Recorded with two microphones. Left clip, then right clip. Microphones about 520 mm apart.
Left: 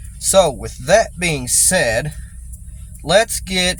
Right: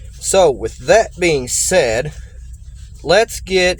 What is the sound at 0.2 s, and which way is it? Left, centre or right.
Speech, left.